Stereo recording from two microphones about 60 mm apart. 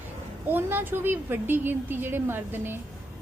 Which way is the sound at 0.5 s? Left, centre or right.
Right.